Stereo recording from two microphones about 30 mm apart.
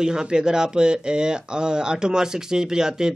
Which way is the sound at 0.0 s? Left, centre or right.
Right.